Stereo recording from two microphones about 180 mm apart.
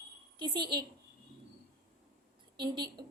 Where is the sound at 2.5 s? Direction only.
25° right (ahead or behind).